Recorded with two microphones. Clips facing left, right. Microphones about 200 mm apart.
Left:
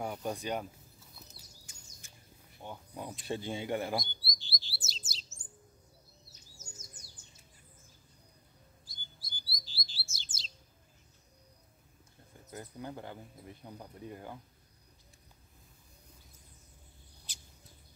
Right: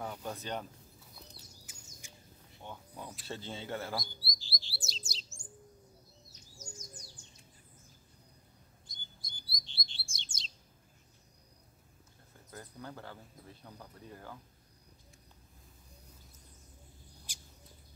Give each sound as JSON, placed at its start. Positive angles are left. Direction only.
{"t": 0.0, "sound": "speech", "side_deg": 15}
{"t": 1.7, "sound": "bird", "side_deg": -10}
{"t": 2.6, "sound": "speech", "side_deg": 15}
{"t": 4.0, "sound": "chirp", "side_deg": 0}
{"t": 6.6, "sound": "bird", "side_deg": 5}
{"t": 8.8, "sound": "chirp", "side_deg": 5}
{"t": 12.4, "sound": "speech", "side_deg": 15}
{"t": 17.3, "sound": "a sound", "side_deg": -10}